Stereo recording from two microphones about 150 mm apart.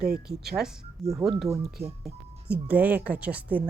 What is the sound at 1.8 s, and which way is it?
Speech, 45° right (ahead or behind).